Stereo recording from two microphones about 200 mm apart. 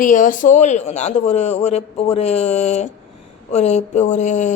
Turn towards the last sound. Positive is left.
turn(degrees=35)  # may be behind; listen again after turning